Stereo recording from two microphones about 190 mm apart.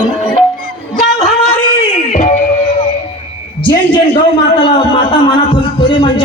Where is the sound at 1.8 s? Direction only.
40° left (ahead or behind).